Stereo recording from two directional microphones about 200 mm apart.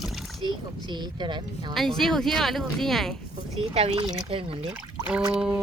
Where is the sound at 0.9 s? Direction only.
20° right (ahead or behind).